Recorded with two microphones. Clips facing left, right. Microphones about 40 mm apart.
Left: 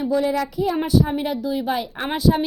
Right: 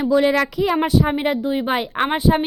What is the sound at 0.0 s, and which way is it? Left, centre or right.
Speech, right.